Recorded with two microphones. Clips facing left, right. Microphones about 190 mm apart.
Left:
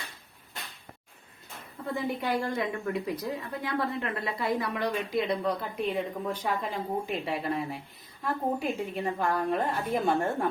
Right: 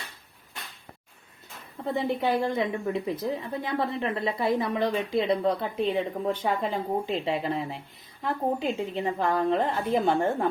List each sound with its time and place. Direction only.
1.9 s a woman's voice: 25° right (ahead or behind)